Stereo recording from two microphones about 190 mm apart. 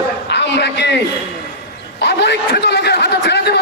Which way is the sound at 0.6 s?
65° left (ahead or behind).